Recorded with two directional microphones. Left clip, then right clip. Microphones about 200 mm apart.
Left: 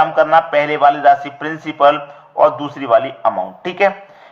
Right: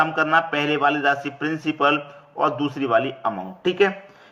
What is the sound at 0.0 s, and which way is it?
A man's voice, 15° right (ahead or behind).